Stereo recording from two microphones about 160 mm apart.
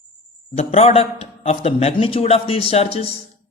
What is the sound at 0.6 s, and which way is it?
A man's voice, 40° left (ahead or behind).